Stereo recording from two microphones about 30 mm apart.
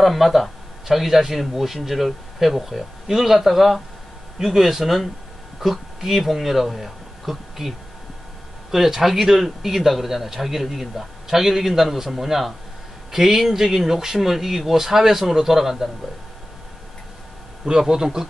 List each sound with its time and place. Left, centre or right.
0.0 s a man's voice: centre
8.7 s a man's voice: centre
17.6 s a man's voice: right